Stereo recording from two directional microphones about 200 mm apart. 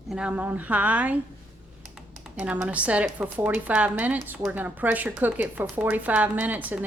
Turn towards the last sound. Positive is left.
turn(degrees=-10)  # may be behind; listen again after turning